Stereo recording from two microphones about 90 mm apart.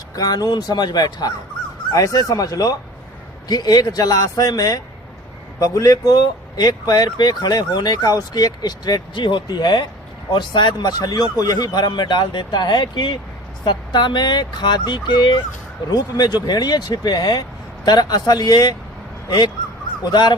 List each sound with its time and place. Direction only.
0.2 s speech: 45° left (ahead or behind)
20.1 s speech: 50° left (ahead or behind)